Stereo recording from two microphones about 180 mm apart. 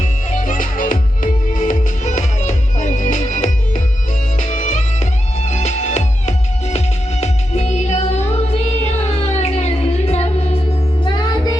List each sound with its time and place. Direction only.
0.0 s music: 45° left (ahead or behind)